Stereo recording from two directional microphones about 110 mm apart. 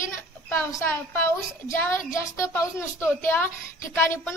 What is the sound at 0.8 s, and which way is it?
A woman's voice, 20° left (ahead or behind).